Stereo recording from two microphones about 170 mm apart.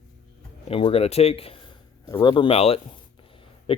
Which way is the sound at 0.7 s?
35° left (ahead or behind).